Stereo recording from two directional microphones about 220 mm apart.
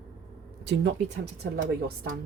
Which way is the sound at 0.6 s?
55° right (ahead or behind).